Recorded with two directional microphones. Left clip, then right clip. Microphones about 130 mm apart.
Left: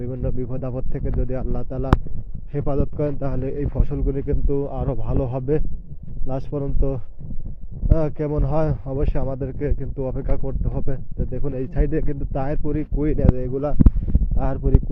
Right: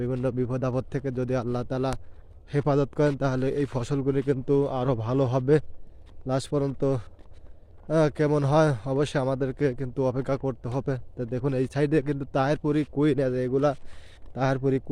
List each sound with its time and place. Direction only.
0.0 s speech: 40° right (ahead or behind)